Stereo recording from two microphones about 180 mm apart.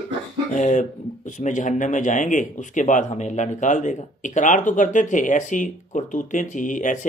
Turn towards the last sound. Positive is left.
turn(degrees=45)  # may be behind; listen again after turning